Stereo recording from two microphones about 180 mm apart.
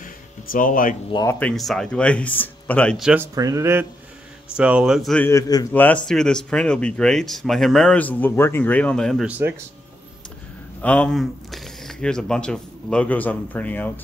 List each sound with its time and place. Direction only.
0.0 s a sound: 50° left (ahead or behind)
1.4 s speech: centre (ahead or behind)
3.0 s speech: 5° right (ahead or behind)
3.3 s speech: 20° right (ahead or behind); by 5.2 s centre (ahead or behind)
5.2 s a man's voice: 20° left (ahead or behind); by 9.3 s 5° left (ahead or behind)
10.8 s speech: 5° left (ahead or behind)